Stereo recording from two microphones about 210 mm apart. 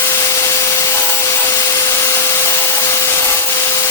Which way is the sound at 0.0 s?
15° left (ahead or behind).